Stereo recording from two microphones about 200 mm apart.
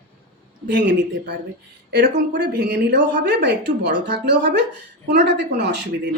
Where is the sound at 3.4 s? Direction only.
60° right (ahead or behind).